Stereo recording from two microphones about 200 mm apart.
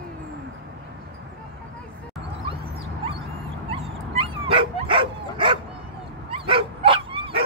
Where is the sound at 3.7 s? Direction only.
25° right (ahead or behind).